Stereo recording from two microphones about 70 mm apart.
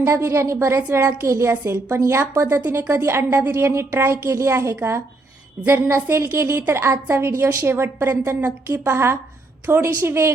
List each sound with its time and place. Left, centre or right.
0.0 s a woman's voice: right
0.8 s a woman's voice: right
1.0 s a woman's voice: right